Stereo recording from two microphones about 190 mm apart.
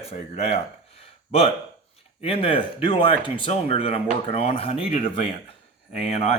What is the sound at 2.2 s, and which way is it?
Speech, 30° left (ahead or behind).